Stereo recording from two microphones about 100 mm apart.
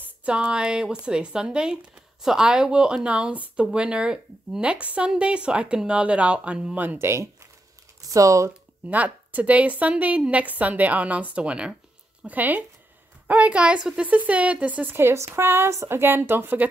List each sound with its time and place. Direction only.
0.0 s a woman's voice: 10° right (ahead or behind)
7.0 s speech: 25° right (ahead or behind)
8.8 s a woman's voice: 15° right (ahead or behind)